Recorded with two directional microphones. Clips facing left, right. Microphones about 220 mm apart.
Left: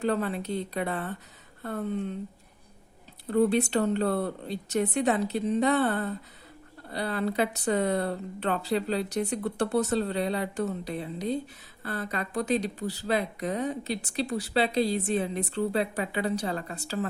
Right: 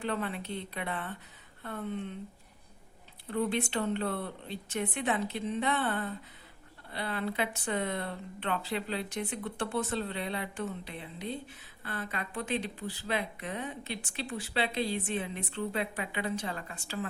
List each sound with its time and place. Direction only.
0.0 s speech: 40° left (ahead or behind)
3.2 s speech: 40° left (ahead or behind)